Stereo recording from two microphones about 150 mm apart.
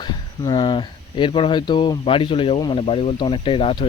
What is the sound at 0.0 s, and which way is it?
Speech, 30° left (ahead or behind).